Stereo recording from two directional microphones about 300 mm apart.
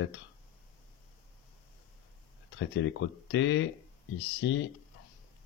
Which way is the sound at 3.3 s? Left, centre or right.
Left.